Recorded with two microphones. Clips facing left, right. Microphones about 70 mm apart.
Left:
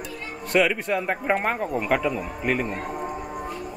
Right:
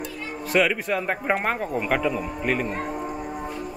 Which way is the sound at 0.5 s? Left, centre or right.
Centre.